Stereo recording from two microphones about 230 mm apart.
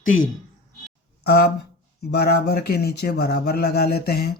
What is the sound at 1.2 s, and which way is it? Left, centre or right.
Speech, left.